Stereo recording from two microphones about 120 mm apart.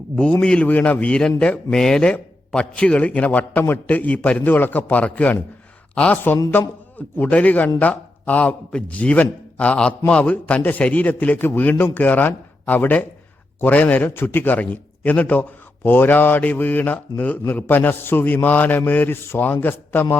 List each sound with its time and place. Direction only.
0.4 s a man's voice: 10° left (ahead or behind)